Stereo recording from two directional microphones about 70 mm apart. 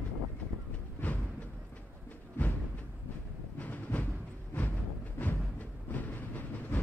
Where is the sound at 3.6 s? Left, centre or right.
Left.